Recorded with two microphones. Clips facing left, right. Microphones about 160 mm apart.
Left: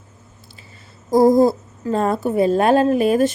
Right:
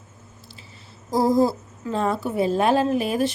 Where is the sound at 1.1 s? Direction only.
50° left (ahead or behind).